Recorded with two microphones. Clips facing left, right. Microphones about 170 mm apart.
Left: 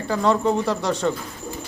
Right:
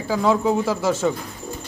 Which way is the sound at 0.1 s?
5° right (ahead or behind).